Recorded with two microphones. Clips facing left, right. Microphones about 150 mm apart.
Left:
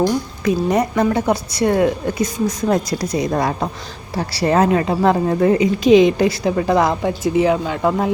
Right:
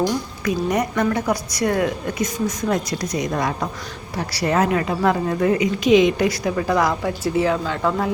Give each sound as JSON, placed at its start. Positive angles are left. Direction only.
{"t": 0.4, "sound": "a woman's voice", "side_deg": 30}